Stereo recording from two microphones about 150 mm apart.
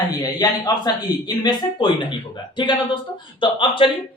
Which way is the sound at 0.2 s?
25° left (ahead or behind).